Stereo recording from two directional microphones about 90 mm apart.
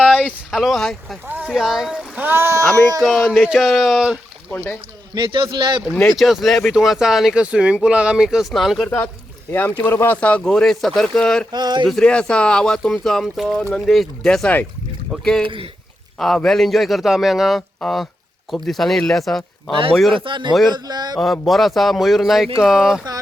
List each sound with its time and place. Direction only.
0.0 s speech: centre (ahead or behind)
2.1 s speech: 20° right (ahead or behind)
3.0 s speech: 5° left (ahead or behind)
4.5 s speech: 15° left (ahead or behind)
5.1 s speech: 60° right (ahead or behind)
6.0 s speech: centre (ahead or behind)
9.5 s speech: 20° left (ahead or behind)
10.2 s speech: 15° left (ahead or behind)
11.5 s speech: 55° right (ahead or behind)
11.9 s speech: 10° left (ahead or behind)
13.5 s speech: 10° left (ahead or behind)
20.1 s speech: 65° right (ahead or behind)
20.7 s speech: 50° right (ahead or behind)
21.2 s speech: centre (ahead or behind)